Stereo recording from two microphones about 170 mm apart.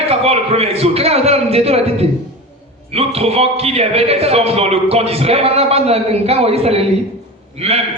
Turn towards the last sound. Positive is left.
turn(degrees=-35)  # may be behind; listen again after turning